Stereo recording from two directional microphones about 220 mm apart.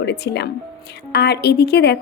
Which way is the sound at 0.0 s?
50° left (ahead or behind).